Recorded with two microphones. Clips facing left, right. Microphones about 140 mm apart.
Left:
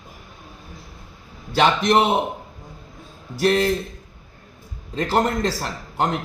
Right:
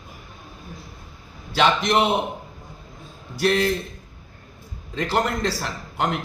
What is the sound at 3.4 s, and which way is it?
Speech, 40° left (ahead or behind).